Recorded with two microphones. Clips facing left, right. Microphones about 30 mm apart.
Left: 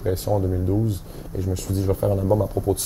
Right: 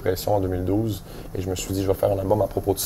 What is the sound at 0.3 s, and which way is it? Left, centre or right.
Speech, right.